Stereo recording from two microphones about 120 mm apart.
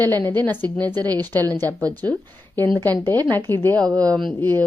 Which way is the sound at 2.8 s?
15° left (ahead or behind).